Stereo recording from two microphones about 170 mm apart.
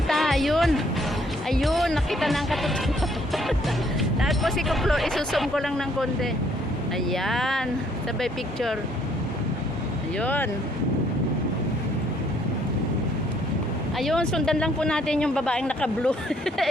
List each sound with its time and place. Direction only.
0.1 s music: centre (ahead or behind)
1.5 s speech: centre (ahead or behind)
4.2 s speech: centre (ahead or behind)
7.1 s speech: centre (ahead or behind)
10.2 s speech: 10° left (ahead or behind)
14.0 s speech: 5° left (ahead or behind)